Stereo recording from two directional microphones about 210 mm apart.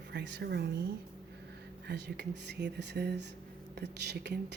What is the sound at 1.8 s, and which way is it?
Speech, 55° right (ahead or behind).